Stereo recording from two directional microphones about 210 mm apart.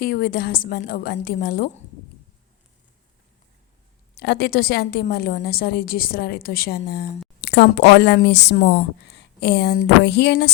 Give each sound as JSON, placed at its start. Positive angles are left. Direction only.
{"t": 0.0, "sound": "a woman's voice", "side_deg": 45}
{"t": 4.2, "sound": "a woman's voice", "side_deg": 50}